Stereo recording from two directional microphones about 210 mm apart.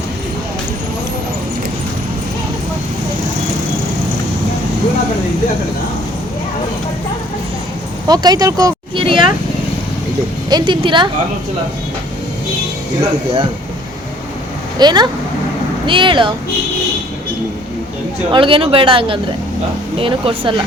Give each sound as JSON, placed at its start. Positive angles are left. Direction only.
{"t": 8.0, "sound": "speech", "side_deg": -20}
{"t": 10.5, "sound": "speech", "side_deg": -20}
{"t": 14.8, "sound": "speech", "side_deg": -20}
{"t": 18.3, "sound": "speech", "side_deg": -25}